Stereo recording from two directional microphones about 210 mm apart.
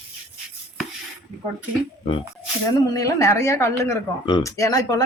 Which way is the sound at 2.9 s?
15° left (ahead or behind).